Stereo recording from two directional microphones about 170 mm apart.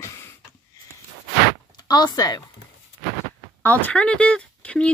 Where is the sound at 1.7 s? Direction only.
25° left (ahead or behind).